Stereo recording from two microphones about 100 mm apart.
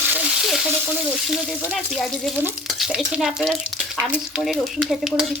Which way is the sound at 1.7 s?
Centre (ahead or behind).